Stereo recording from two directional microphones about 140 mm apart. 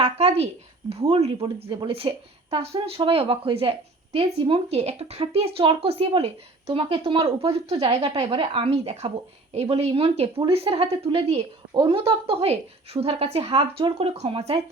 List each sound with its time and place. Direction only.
0.0 s speech: 45° right (ahead or behind)